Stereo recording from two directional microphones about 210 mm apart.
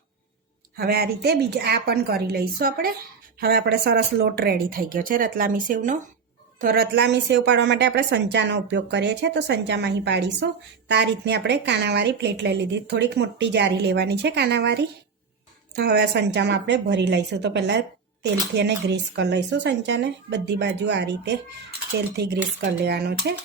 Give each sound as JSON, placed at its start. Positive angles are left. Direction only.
{"t": 0.8, "sound": "a woman's voice", "side_deg": -45}